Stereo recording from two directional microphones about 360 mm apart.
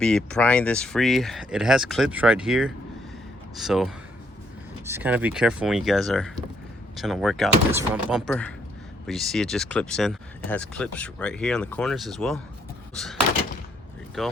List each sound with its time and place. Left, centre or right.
0.0 s speech: centre
12.9 s door: centre
14.2 s speech: centre